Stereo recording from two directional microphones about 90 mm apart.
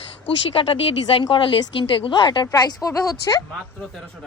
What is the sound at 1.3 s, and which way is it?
A woman's voice, 65° left (ahead or behind).